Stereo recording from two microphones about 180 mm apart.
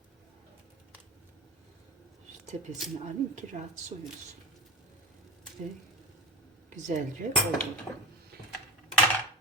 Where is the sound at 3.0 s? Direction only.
40° right (ahead or behind).